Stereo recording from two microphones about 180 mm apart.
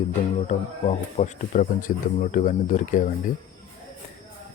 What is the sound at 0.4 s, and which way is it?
Speech, 40° left (ahead or behind).